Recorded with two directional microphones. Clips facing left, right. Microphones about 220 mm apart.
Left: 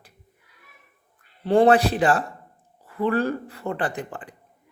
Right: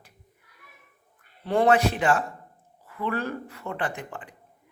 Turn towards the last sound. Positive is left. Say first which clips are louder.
# left 4 dB
turn(degrees=35)  # may be behind; listen again after turning